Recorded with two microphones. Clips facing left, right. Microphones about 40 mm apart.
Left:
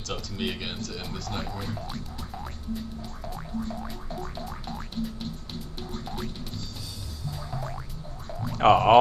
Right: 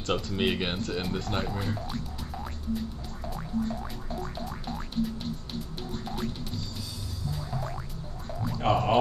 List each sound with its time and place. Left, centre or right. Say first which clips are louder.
0.0 s speech: right 5 dB; right
1.4 s speech: right 2 dB; centre
1.8 s music: right 1 dB; centre
8.5 s speech: left 7 dB; left